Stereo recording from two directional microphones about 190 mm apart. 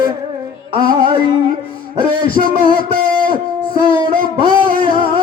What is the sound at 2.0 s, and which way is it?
Music, 50° right (ahead or behind).